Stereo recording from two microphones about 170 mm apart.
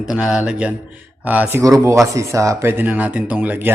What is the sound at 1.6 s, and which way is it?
A man's voice, 20° right (ahead or behind).